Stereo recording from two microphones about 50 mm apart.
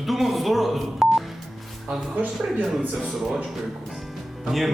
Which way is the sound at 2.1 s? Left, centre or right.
Right.